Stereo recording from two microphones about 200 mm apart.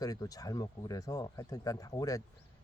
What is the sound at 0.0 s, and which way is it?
Speech, 20° left (ahead or behind).